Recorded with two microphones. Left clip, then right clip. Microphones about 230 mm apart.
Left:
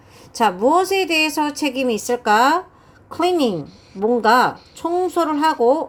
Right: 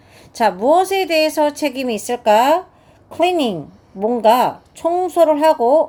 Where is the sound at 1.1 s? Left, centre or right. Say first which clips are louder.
Right 5 dB; left.